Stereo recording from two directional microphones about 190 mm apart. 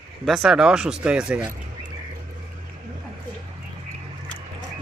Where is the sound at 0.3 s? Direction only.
Centre (ahead or behind).